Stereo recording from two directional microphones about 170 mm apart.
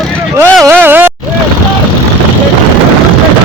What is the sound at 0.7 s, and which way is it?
Speech, 10° right (ahead or behind).